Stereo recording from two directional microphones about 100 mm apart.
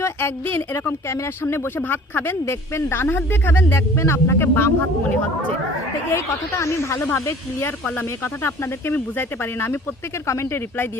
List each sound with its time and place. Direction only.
0.0 s speech: 20° left (ahead or behind)